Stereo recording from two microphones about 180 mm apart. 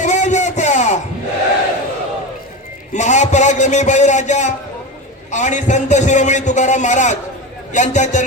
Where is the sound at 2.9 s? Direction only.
40° left (ahead or behind).